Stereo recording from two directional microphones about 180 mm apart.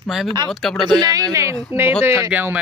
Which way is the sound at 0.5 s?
Centre (ahead or behind).